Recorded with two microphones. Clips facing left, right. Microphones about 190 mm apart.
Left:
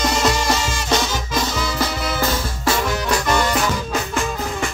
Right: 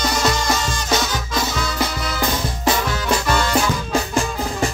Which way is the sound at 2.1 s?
15° right (ahead or behind).